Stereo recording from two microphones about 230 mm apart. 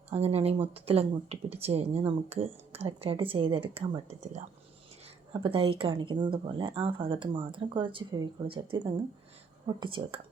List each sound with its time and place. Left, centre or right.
0.1 s speech: right